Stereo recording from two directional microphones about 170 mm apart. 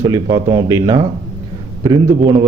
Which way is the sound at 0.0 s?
25° right (ahead or behind).